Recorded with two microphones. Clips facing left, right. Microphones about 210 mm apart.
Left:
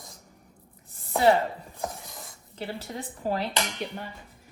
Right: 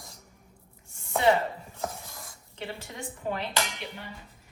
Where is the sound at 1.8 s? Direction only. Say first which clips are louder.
Left 1 dB; 15° left (ahead or behind).